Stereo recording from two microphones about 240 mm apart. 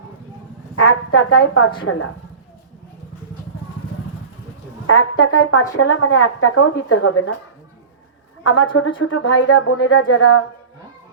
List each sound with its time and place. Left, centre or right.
0.8 s speech: left
4.9 s speech: left
8.7 s speech: left